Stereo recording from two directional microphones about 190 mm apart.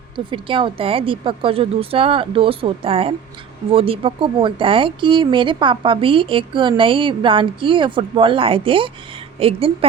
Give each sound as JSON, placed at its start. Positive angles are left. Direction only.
{"t": 0.3, "sound": "a woman's voice", "side_deg": -25}